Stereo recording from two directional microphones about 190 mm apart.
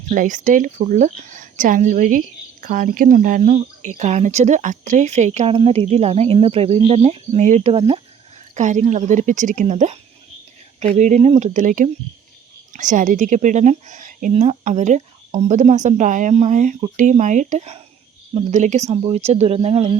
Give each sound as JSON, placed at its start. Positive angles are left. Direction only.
{"t": 0.1, "sound": "speech", "side_deg": -45}